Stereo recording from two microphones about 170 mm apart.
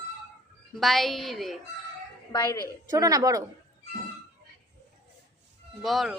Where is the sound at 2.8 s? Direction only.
20° right (ahead or behind).